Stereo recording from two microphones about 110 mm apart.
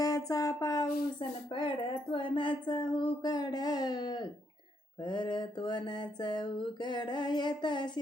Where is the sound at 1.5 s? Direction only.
50° left (ahead or behind).